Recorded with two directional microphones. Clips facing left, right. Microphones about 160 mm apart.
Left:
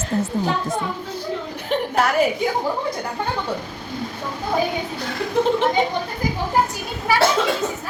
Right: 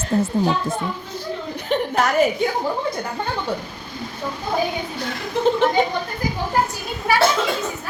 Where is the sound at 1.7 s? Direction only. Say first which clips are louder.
Even; 5° left (ahead or behind).